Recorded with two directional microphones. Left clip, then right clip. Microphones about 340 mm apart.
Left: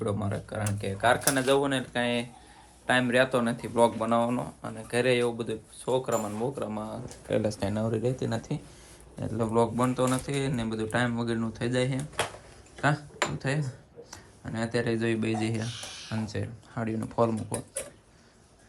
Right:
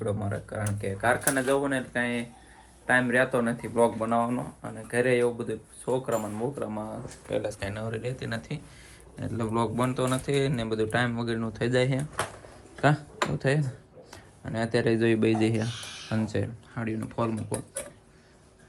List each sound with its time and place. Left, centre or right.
0.0 s speech: centre
7.3 s speech: left; by 17.8 s centre